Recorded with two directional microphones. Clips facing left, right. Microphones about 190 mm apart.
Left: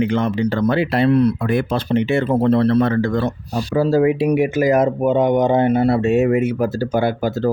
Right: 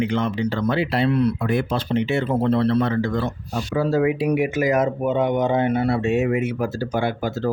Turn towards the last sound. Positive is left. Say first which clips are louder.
# left 4 dB
turn(degrees=40)  # may be behind; listen again after turning